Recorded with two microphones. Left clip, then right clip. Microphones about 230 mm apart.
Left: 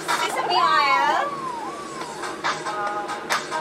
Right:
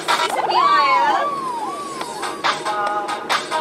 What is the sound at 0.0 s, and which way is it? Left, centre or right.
Children playing, right.